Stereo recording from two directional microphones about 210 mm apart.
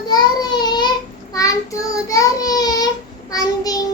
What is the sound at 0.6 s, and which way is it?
Child singing, 20° left (ahead or behind).